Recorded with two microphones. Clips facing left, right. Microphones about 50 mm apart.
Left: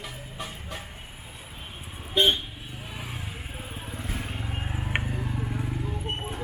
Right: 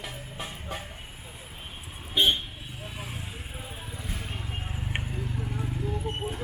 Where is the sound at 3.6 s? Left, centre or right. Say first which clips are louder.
Left 3 dB; left.